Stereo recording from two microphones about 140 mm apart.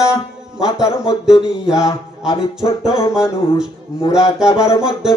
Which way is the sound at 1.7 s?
5° right (ahead or behind).